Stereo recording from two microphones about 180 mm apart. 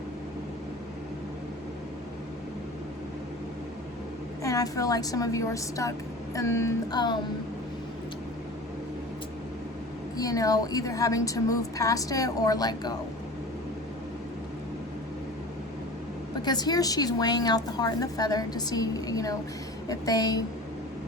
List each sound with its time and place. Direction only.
4.4 s a woman's voice: 20° left (ahead or behind)
6.3 s music: 15° left (ahead or behind)
10.2 s a woman's voice: 20° left (ahead or behind)
16.4 s a woman's voice: 25° left (ahead or behind)